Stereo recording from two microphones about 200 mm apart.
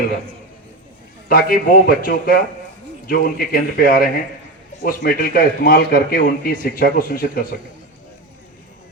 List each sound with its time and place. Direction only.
1.3 s speech: 45° left (ahead or behind)